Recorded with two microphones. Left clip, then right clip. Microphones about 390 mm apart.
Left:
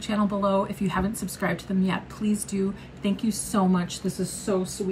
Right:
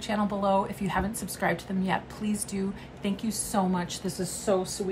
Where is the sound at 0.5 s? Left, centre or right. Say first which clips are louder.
Left 2 dB; right.